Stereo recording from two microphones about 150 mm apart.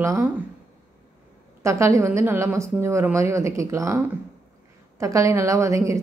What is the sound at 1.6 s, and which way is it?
A woman's voice, 20° right (ahead or behind).